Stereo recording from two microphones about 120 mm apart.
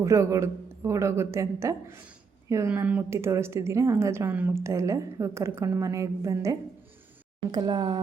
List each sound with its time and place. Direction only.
0.0 s speech: 25° right (ahead or behind)
2.6 s speech: 10° right (ahead or behind); by 8.0 s 40° right (ahead or behind)